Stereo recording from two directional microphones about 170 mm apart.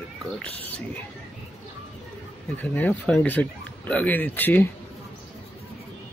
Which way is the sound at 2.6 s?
10° left (ahead or behind).